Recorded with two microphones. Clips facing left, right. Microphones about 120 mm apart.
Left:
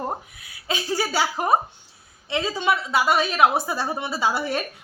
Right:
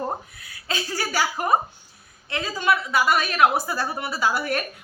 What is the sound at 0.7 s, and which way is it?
A woman's voice, 20° left (ahead or behind).